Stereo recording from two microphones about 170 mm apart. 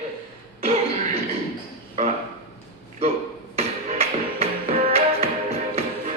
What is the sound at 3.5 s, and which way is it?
Music, 35° right (ahead or behind).